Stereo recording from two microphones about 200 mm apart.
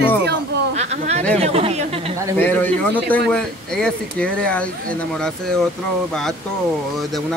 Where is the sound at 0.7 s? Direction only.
35° right (ahead or behind).